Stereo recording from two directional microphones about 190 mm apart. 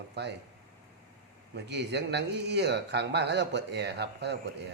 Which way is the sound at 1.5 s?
65° right (ahead or behind).